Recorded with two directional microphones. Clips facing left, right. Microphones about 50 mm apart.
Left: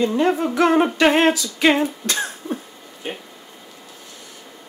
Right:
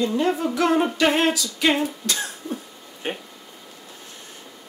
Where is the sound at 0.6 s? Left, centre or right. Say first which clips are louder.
Left 4 dB; left.